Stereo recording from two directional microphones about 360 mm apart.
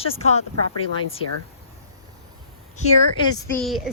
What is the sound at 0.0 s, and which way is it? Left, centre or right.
Speech, centre.